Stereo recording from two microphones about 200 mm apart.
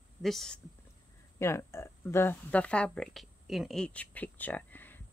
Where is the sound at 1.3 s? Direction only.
15° left (ahead or behind).